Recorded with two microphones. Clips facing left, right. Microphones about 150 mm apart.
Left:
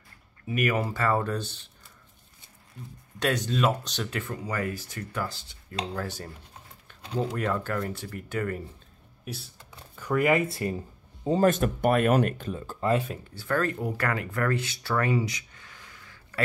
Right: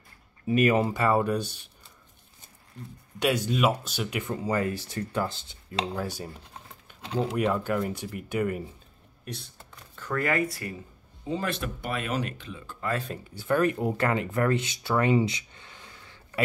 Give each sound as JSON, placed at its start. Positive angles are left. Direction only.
{"t": 0.5, "sound": "speech", "side_deg": -25}
{"t": 3.2, "sound": "speech", "side_deg": -10}
{"t": 4.5, "sound": "speech", "side_deg": -25}
{"t": 5.9, "sound": "speech", "side_deg": -10}
{"t": 6.9, "sound": "a sound", "side_deg": -15}
{"t": 7.3, "sound": "speech", "side_deg": -15}
{"t": 9.2, "sound": "speech", "side_deg": 5}
{"t": 11.2, "sound": "speech", "side_deg": 45}
{"t": 13.3, "sound": "speech", "side_deg": -15}